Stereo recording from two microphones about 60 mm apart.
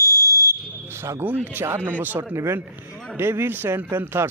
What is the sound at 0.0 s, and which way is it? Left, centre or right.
Fire alarm, left.